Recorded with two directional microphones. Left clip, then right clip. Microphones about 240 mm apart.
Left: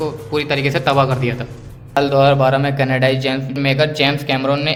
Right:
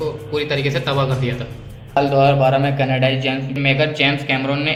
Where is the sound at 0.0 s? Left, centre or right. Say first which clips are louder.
Left 1 dB; left.